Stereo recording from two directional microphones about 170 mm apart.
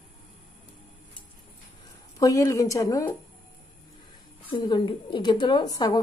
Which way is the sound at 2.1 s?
20° left (ahead or behind).